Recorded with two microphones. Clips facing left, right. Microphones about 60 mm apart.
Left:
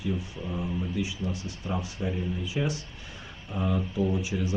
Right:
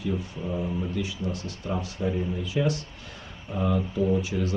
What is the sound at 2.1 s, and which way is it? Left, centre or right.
Speech, centre.